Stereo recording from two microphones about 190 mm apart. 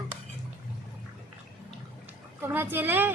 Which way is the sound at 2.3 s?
10° right (ahead or behind).